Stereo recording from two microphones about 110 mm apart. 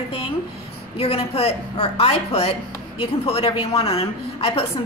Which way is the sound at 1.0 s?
65° left (ahead or behind).